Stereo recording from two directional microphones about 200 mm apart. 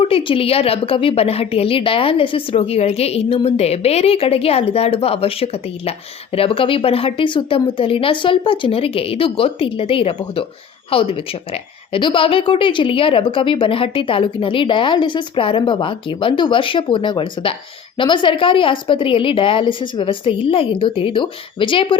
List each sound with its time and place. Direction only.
0.0 s a woman's voice: 25° left (ahead or behind)